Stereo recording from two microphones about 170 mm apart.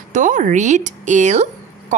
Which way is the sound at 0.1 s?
50° right (ahead or behind).